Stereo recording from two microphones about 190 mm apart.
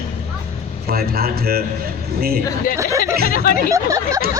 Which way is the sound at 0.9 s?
55° right (ahead or behind).